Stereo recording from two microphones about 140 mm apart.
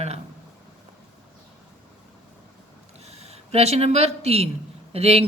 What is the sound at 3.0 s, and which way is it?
Speech, 50° right (ahead or behind).